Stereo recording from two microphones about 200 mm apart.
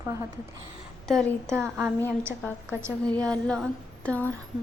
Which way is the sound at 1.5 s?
15° right (ahead or behind).